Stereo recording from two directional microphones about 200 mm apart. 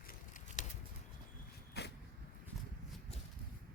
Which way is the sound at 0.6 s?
35° left (ahead or behind).